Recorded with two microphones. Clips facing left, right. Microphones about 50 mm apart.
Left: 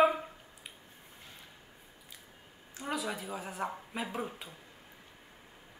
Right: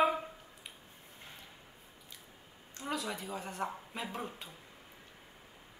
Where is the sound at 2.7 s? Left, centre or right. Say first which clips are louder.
Left 2 dB; centre.